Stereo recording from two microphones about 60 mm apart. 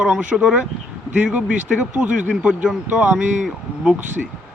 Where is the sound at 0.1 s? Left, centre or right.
Centre.